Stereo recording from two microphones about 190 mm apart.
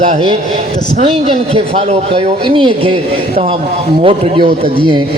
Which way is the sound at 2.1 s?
25° right (ahead or behind).